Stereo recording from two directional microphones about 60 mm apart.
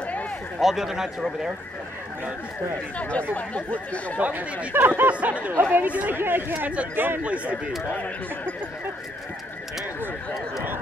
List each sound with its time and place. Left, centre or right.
0.6 s speech: centre
3.0 s speech: left
4.2 s speech: right
5.5 s speech: right
5.9 s speech: right
6.1 s speech: right